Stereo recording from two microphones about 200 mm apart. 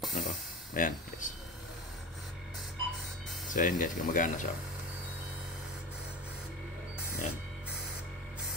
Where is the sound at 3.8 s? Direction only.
45° left (ahead or behind).